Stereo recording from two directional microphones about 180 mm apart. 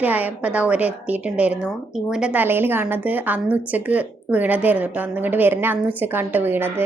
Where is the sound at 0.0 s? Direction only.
10° right (ahead or behind).